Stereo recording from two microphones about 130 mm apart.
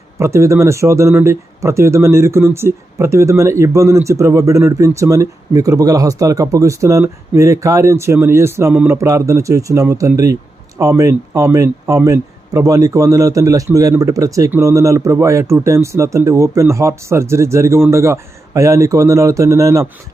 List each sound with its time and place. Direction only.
0.2 s speech: 20° right (ahead or behind)